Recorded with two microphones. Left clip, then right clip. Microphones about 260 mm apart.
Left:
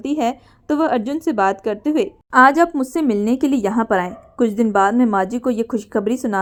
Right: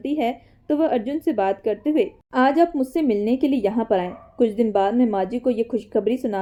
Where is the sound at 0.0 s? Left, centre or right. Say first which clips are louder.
Left 3 dB; left.